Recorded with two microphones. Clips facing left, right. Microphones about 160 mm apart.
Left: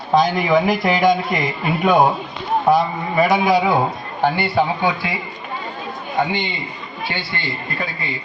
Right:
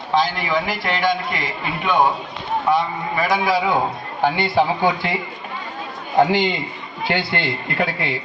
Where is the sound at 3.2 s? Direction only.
25° left (ahead or behind).